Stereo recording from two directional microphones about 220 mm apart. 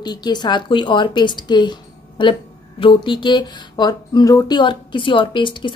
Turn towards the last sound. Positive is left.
turn(degrees=20)  # may be behind; listen again after turning